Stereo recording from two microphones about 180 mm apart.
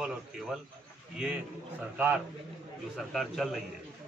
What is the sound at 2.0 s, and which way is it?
Speech, 10° right (ahead or behind).